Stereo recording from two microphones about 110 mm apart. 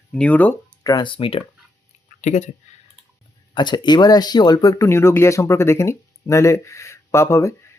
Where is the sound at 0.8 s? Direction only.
45° left (ahead or behind).